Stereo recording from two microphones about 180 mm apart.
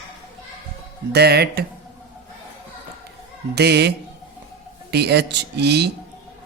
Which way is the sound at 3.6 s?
65° right (ahead or behind).